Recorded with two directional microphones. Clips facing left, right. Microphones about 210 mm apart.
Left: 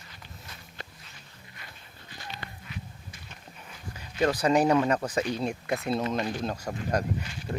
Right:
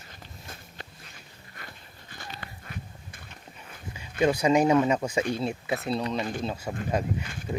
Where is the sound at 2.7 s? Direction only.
55° right (ahead or behind).